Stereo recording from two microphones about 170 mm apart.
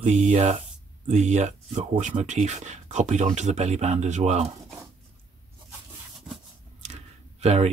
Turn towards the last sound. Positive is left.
turn(degrees=-40)  # may be behind; listen again after turning